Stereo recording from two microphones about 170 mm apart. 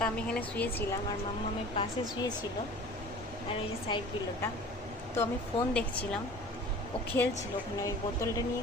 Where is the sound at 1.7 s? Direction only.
25° left (ahead or behind).